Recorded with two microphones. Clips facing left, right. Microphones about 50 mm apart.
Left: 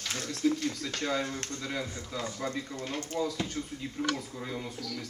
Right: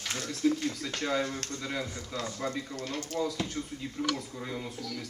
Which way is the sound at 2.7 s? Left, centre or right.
Centre.